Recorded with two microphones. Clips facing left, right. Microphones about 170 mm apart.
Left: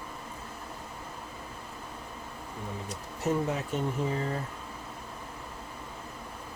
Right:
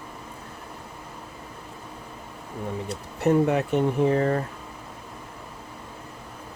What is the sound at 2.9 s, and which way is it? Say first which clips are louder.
Speech: right 8 dB; 65° right (ahead or behind).